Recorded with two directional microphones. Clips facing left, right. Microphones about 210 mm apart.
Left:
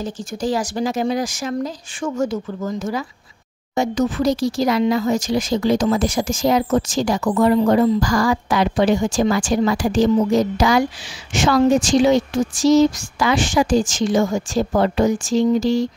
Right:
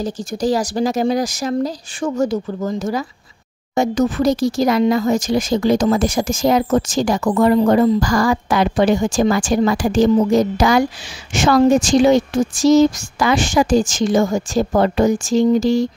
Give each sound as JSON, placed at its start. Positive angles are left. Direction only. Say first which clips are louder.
{"t": 0.0, "sound": "speech", "louder": "right 4 dB", "side_deg": -40}